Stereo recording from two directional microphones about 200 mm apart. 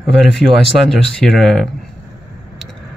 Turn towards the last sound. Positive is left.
turn(degrees=0)  # may be behind; listen again after turning